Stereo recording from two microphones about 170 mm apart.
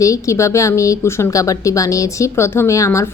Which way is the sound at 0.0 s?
20° left (ahead or behind).